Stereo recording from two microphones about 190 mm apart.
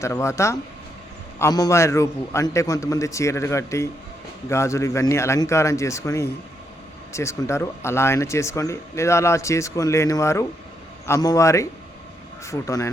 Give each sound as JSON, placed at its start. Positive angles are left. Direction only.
{"t": 0.0, "sound": "speech", "side_deg": 15}